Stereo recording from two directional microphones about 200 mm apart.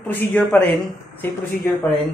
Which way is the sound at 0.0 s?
10° left (ahead or behind).